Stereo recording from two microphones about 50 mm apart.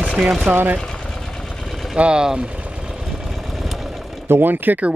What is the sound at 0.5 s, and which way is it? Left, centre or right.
Speech, right.